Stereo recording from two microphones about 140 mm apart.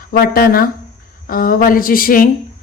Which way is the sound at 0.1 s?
90° left.